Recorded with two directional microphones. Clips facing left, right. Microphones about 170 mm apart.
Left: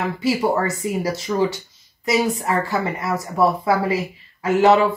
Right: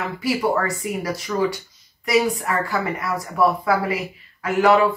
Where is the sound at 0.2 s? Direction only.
20° left (ahead or behind).